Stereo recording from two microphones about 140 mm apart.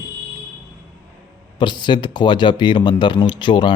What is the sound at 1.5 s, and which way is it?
Speech, 35° left (ahead or behind).